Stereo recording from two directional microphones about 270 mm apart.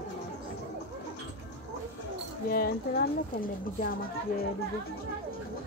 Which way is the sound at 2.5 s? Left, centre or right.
Left.